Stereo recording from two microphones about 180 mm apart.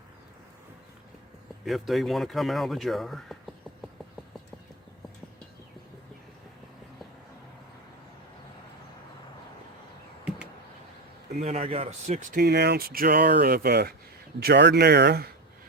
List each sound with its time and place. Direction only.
1.6 s speech: centre (ahead or behind)
11.3 s speech: 35° right (ahead or behind)
12.4 s speech: 65° right (ahead or behind)